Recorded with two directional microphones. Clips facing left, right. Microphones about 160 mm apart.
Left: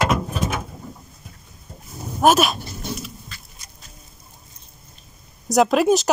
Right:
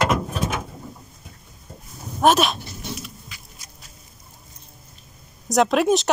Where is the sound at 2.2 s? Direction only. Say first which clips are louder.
Left 1 dB; 5° left (ahead or behind).